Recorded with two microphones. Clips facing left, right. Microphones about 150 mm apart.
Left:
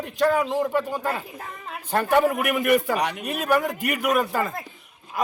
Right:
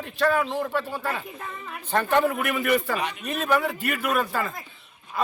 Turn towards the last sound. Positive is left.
turn(degrees=15)  # may be behind; listen again after turning